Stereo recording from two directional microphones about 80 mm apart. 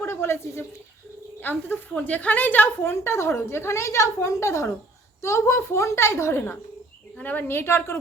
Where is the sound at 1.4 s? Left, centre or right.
Left.